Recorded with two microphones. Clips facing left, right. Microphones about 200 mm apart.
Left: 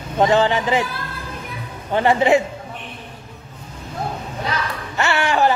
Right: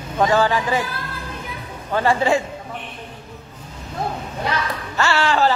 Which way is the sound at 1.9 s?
20° left (ahead or behind).